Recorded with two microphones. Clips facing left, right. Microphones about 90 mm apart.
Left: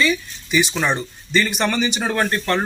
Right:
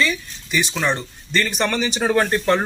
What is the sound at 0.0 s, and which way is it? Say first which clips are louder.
Speech: left 2 dB; 5° left (ahead or behind).